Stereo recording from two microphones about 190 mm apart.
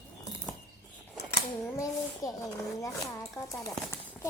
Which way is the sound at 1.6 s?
15° left (ahead or behind).